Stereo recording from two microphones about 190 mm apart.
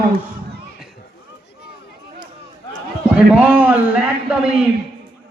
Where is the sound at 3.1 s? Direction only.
5° right (ahead or behind).